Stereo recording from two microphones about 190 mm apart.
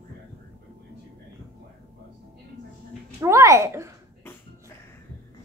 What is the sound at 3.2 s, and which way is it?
Speech, 15° right (ahead or behind).